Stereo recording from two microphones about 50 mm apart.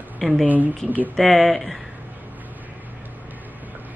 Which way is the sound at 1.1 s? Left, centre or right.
Centre.